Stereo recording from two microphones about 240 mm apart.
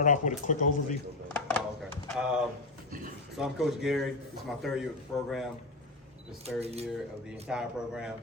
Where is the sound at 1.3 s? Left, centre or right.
Centre.